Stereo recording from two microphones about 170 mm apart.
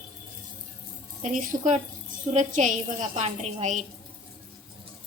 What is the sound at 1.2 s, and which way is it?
A woman's voice, 50° right (ahead or behind).